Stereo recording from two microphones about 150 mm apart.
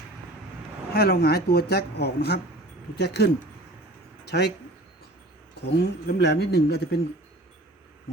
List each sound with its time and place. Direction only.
0.9 s a man's voice: 90° left
5.5 s a man's voice: 90° left